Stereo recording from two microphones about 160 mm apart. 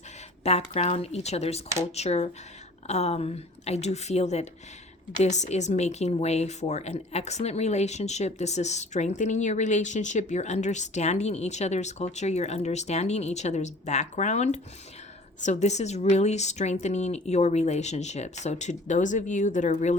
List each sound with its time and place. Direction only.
0.4 s speech: 40° left (ahead or behind)